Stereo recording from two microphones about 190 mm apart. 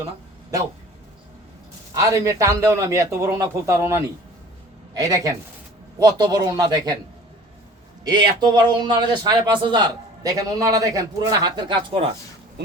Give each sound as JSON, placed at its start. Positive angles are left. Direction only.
{"t": 1.9, "sound": "a man's voice", "side_deg": -15}
{"t": 8.0, "sound": "a man's voice", "side_deg": -20}